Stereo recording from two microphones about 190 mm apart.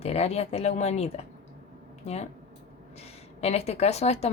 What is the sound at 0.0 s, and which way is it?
Speech, 35° left (ahead or behind).